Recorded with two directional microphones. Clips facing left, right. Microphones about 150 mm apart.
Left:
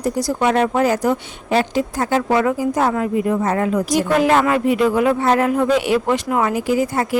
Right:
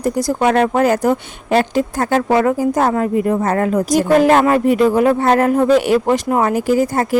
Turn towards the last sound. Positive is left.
turn(degrees=-45)  # may be behind; listen again after turning